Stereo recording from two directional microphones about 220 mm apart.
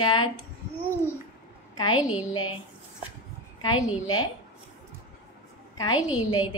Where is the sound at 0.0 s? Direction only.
20° left (ahead or behind).